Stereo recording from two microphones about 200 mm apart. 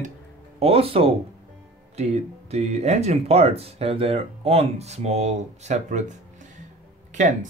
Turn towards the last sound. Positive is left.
turn(degrees=-40)  # may be behind; listen again after turning